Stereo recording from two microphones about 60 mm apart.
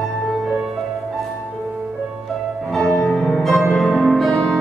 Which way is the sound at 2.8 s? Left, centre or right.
Centre.